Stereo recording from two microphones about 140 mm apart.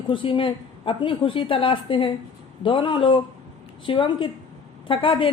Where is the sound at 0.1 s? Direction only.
40° left (ahead or behind).